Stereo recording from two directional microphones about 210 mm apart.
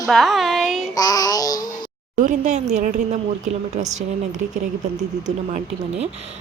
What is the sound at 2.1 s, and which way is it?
Speech, 35° right (ahead or behind).